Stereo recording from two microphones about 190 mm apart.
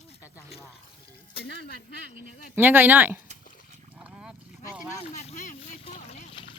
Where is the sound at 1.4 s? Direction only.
55° left (ahead or behind).